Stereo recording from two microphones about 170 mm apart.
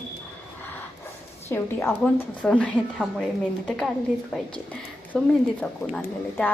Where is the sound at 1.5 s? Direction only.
15° left (ahead or behind).